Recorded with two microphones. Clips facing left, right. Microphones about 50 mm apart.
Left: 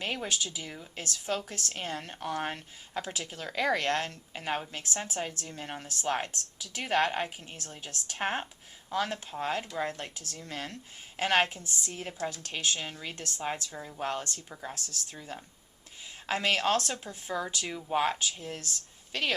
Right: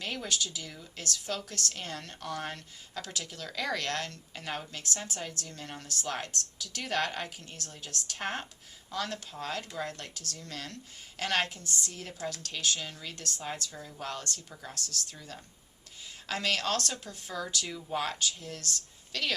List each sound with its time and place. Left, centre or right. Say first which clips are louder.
0.0 s speech: left 1 dB; left